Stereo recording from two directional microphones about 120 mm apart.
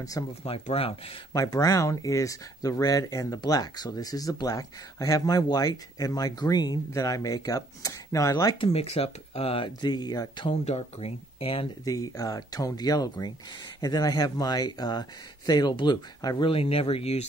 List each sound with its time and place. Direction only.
0.4 s speech: 55° left (ahead or behind)
1.3 s speech: 30° left (ahead or behind)
8.5 s speech: 55° left (ahead or behind)
9.8 s speech: 35° left (ahead or behind)
10.4 s speech: 60° left (ahead or behind)
11.8 s speech: 30° left (ahead or behind)
16.4 s speech: 50° left (ahead or behind)